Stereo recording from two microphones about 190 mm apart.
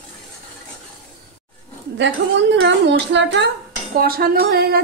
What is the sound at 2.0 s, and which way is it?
Speech, 65° right (ahead or behind).